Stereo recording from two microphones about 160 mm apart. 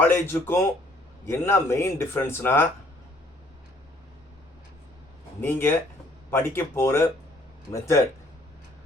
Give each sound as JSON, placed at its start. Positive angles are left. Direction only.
{"t": 0.0, "sound": "speech", "side_deg": 15}
{"t": 5.4, "sound": "speech", "side_deg": 15}